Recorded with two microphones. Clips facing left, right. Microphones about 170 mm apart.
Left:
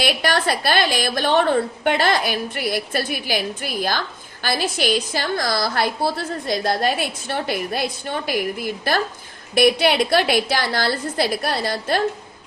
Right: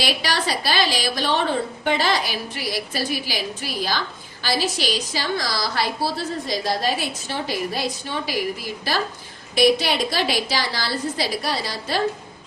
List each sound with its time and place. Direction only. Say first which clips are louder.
0.0 s a woman's voice: left 4 dB; 55° left (ahead or behind)